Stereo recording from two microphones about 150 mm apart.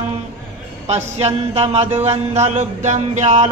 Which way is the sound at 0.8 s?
45° right (ahead or behind).